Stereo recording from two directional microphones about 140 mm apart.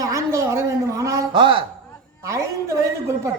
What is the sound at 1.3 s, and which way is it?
Speech, 35° right (ahead or behind).